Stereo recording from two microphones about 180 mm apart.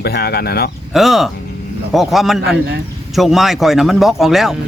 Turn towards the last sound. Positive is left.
turn(degrees=0)  # may be behind; listen again after turning